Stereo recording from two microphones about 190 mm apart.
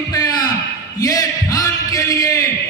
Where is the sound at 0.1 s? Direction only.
20° left (ahead or behind).